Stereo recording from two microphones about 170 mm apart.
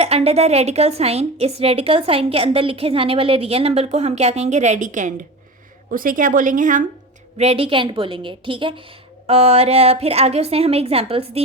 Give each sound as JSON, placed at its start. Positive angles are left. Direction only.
{"t": 0.0, "sound": "a woman's voice", "side_deg": -35}
{"t": 7.3, "sound": "a woman's voice", "side_deg": -35}